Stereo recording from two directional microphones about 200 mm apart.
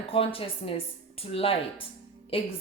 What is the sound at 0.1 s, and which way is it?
A woman's voice, 30° left (ahead or behind).